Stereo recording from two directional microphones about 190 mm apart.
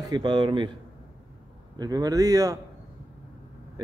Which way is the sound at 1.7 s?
20° right (ahead or behind).